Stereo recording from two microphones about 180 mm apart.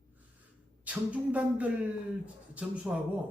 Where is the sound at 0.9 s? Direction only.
10° right (ahead or behind).